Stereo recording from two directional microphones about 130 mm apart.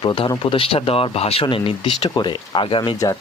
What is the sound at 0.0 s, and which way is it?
Speech, 40° left (ahead or behind).